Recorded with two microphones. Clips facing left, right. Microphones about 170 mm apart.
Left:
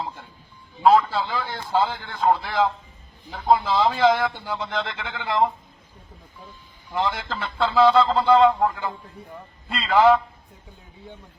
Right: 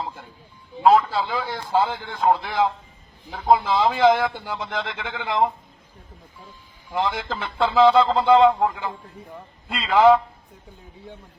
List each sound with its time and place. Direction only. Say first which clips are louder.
0.8 s a man's voice: even; 5° right (ahead or behind)
7.0 s a man's voice: right 1 dB; centre (ahead or behind)
7.3 s a man's voice: right 1 dB; 15° right (ahead or behind)